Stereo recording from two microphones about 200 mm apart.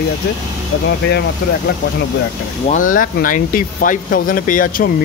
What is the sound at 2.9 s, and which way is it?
Speech, 45° left (ahead or behind).